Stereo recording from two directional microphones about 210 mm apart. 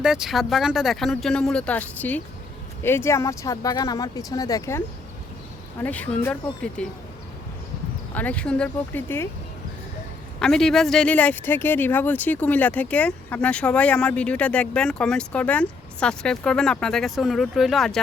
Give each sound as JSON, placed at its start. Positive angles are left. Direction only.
{"t": 0.0, "sound": "speech", "side_deg": -5}
{"t": 5.8, "sound": "speech", "side_deg": 5}
{"t": 8.1, "sound": "speech", "side_deg": 5}
{"t": 10.4, "sound": "speech", "side_deg": 5}